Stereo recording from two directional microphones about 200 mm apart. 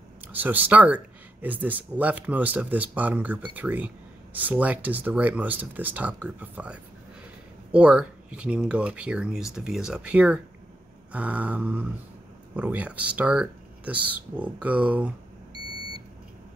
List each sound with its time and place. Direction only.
0.3 s speech: 10° right (ahead or behind)